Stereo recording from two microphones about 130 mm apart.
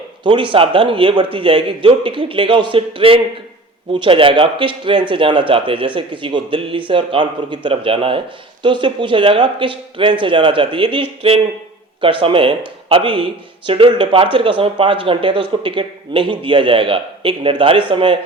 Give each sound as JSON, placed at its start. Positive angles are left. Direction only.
{"t": 0.3, "sound": "speech", "side_deg": -40}